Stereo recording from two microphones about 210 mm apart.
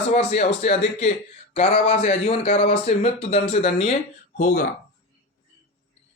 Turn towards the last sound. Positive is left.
turn(degrees=40)  # may be behind; listen again after turning